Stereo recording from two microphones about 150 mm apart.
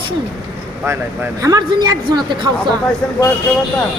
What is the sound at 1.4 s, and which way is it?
A man's voice, 25° right (ahead or behind).